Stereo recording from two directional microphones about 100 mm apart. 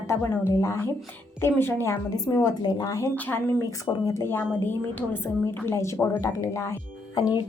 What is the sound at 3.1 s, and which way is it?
Speech, 15° left (ahead or behind).